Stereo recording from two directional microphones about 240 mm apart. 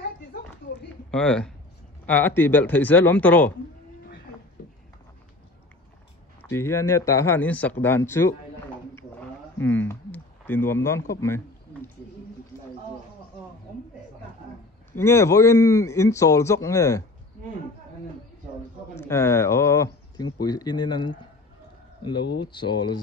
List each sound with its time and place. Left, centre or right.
1.1 s a man's voice: centre
6.5 s speech: centre
14.9 s a man's voice: centre
19.0 s a man's voice: centre
22.4 s speech: centre